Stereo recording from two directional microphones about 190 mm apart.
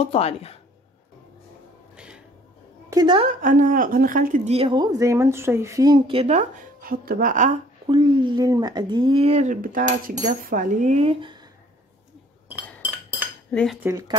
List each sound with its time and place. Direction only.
0.0 s speech: 30° left (ahead or behind)
2.0 s a sound: 5° right (ahead or behind)
2.9 s a woman's voice: 20° right (ahead or behind)
3.3 s a woman's voice: 45° right (ahead or behind)
4.5 s speech: 30° right (ahead or behind)
7.8 s speech: 25° right (ahead or behind)
13.5 s cutlery: 5° left (ahead or behind)
13.8 s speech: 15° right (ahead or behind)